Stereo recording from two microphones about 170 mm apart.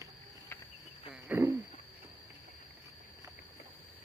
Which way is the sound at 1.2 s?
10° right (ahead or behind).